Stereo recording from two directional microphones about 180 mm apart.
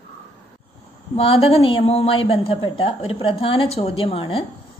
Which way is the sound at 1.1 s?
30° left (ahead or behind).